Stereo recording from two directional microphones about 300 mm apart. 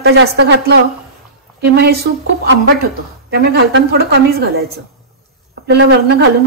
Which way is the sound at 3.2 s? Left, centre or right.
Right.